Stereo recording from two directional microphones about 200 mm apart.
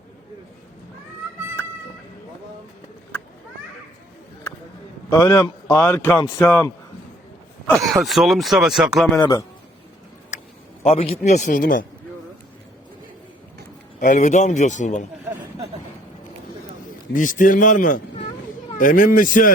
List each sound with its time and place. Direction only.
5.0 s speech: 15° left (ahead or behind)
7.7 s speech: centre (ahead or behind)
10.8 s speech: 35° left (ahead or behind)
14.0 s speech: 40° left (ahead or behind)
17.2 s speech: 40° left (ahead or behind)